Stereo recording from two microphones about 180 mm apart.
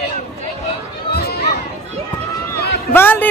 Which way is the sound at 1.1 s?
60° left (ahead or behind).